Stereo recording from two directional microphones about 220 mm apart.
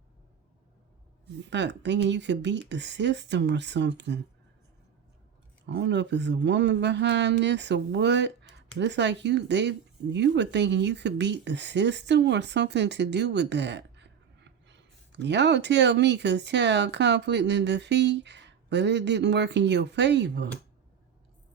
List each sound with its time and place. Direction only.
1.4 s speech: 55° right (ahead or behind)
5.6 s speech: 50° right (ahead or behind)